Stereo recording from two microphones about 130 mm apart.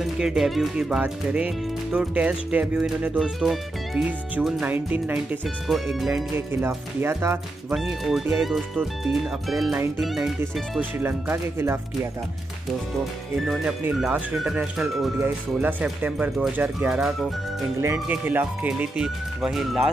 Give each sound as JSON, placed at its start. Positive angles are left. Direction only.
{"t": 0.0, "sound": "speech", "side_deg": -5}
{"t": 5.7, "sound": "speech", "side_deg": 0}
{"t": 6.3, "sound": "speech", "side_deg": -20}
{"t": 7.7, "sound": "speech", "side_deg": 0}
{"t": 10.8, "sound": "speech", "side_deg": -15}
{"t": 13.4, "sound": "speech", "side_deg": -5}
{"t": 15.1, "sound": "speech", "side_deg": -15}
{"t": 17.7, "sound": "speech", "side_deg": -20}